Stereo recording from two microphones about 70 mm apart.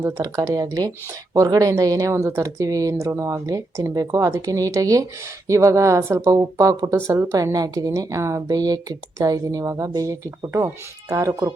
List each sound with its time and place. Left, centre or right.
0.2 s a woman's voice: right
3.1 s speech: right
3.3 s a woman's voice: right
7.1 s a woman's voice: right